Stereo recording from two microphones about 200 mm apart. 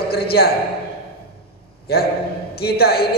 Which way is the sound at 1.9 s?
50° left (ahead or behind).